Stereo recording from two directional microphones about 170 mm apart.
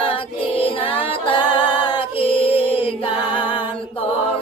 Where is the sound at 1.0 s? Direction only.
30° left (ahead or behind).